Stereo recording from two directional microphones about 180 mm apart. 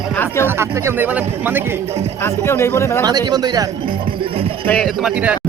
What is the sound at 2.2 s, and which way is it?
Speech, 15° left (ahead or behind).